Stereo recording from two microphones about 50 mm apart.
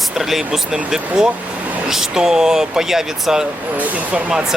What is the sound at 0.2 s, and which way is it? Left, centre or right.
Speech, centre.